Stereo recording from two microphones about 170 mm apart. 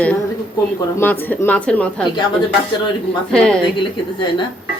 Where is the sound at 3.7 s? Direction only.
30° left (ahead or behind).